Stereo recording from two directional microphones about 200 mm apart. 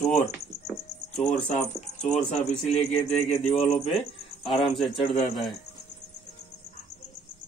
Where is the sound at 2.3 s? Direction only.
Centre (ahead or behind).